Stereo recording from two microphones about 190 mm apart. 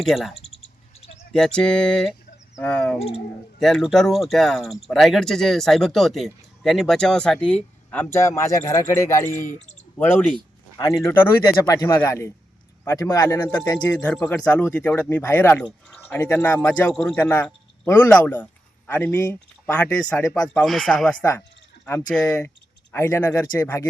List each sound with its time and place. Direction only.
0.0 s speech: centre (ahead or behind)
0.3 s a sound: 30° left (ahead or behind)
1.3 s speech: 5° left (ahead or behind)
9.5 s speech: 40° left (ahead or behind)
10.0 s a man's voice: 10° left (ahead or behind)
20.5 s speech: 5° left (ahead or behind)